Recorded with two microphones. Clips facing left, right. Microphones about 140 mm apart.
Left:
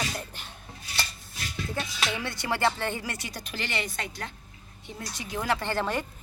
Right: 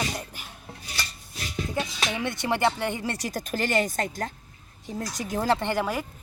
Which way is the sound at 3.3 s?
45° right (ahead or behind).